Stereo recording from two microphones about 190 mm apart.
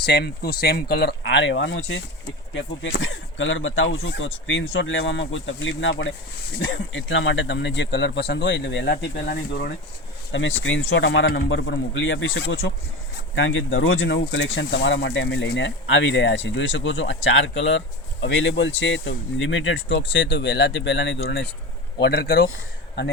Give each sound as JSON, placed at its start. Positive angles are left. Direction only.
{"t": 0.0, "sound": "speech", "side_deg": 60}
{"t": 10.3, "sound": "speech", "side_deg": 80}
{"t": 11.4, "sound": "speech", "side_deg": 75}
{"t": 20.1, "sound": "speech", "side_deg": 65}
{"t": 21.9, "sound": "speech", "side_deg": 55}